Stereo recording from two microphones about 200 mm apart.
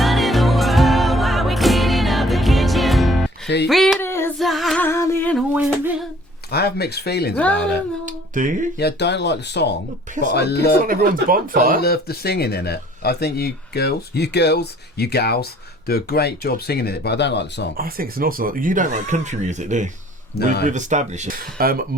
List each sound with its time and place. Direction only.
0.0 s music: centre (ahead or behind)
3.7 s a sound: centre (ahead or behind)
4.0 s female singing: 10° left (ahead or behind)
4.4 s music: centre (ahead or behind)
5.5 s a sound: 5° right (ahead or behind)
6.5 s speech: 55° left (ahead or behind)
8.8 s speech: 55° left (ahead or behind)
10.8 s speech: 45° right (ahead or behind)
11.8 s speech: 50° left (ahead or behind)
17.7 s speech: 50° right (ahead or behind)
20.4 s speech: 55° left (ahead or behind)
20.7 s speech: 35° right (ahead or behind)